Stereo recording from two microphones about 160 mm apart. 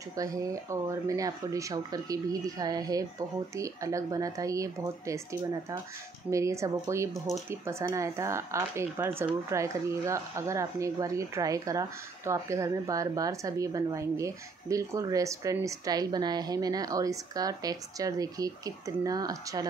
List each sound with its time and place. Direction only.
0.1 s speech: 20° right (ahead or behind)